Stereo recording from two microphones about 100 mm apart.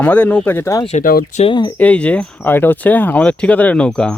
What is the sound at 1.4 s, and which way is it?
Speech, 50° left (ahead or behind).